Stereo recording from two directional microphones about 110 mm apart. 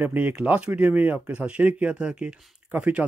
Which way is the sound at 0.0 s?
15° right (ahead or behind).